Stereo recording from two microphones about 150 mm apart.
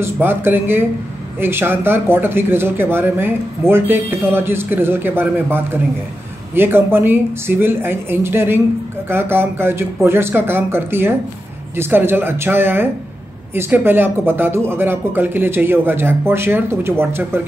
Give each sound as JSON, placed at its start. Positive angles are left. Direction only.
{"t": 0.0, "sound": "speech", "side_deg": -15}